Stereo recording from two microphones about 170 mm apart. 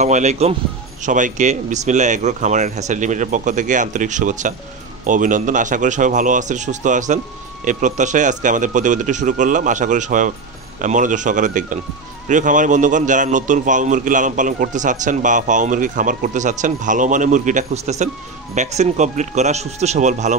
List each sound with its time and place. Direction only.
0.0 s a man's voice: 40° right (ahead or behind)